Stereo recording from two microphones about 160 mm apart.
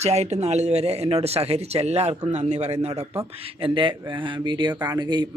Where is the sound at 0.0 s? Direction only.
40° right (ahead or behind).